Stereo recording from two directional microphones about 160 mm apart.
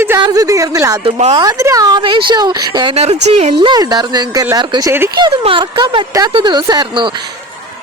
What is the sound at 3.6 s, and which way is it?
Speech, 25° right (ahead or behind).